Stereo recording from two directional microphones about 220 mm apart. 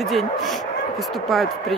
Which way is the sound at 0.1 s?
Centre (ahead or behind).